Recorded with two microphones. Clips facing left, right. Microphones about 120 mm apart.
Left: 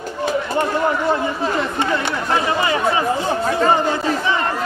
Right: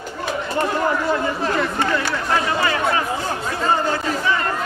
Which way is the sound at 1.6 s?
20° left (ahead or behind).